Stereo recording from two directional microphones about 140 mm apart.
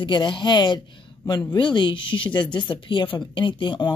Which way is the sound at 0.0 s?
35° left (ahead or behind).